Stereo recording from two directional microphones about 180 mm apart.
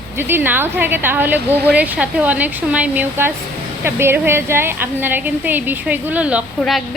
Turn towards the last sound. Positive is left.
turn(degrees=0)  # may be behind; listen again after turning